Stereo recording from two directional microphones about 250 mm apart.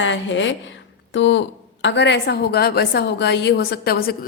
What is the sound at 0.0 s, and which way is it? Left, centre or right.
A woman's voice, left.